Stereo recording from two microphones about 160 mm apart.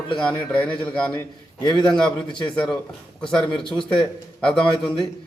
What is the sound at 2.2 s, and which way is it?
Speech, 30° left (ahead or behind).